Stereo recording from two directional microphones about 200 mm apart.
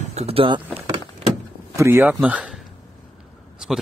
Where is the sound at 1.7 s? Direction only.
15° right (ahead or behind).